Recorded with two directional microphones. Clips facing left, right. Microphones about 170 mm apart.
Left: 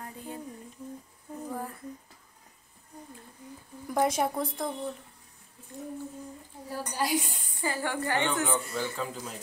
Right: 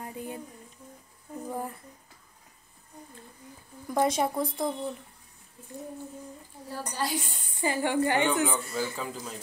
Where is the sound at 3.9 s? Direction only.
5° left (ahead or behind).